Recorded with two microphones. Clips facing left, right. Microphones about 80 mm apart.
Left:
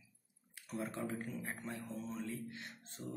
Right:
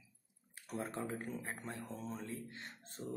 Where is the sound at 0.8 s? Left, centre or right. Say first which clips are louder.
Left 1 dB; right.